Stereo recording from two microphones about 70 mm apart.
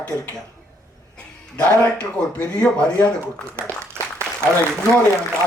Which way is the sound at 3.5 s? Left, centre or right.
Right.